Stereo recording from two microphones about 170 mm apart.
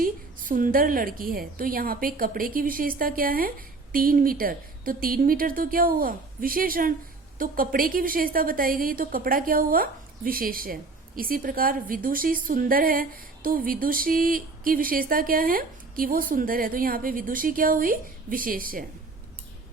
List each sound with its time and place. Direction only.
0.0 s a woman's voice: 55° right (ahead or behind)